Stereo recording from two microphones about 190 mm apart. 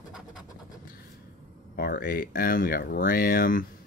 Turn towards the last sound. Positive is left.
turn(degrees=45)  # may be behind; listen again after turning